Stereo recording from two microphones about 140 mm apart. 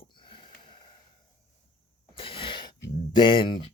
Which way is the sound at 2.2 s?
40° left (ahead or behind).